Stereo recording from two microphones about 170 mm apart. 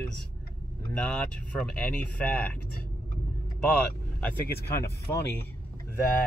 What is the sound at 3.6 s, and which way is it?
Speech, 5° left (ahead or behind).